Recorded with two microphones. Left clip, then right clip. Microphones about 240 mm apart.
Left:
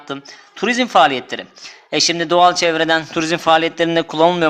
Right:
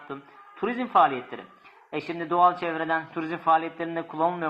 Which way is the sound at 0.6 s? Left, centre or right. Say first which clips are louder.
Left 9 dB; left.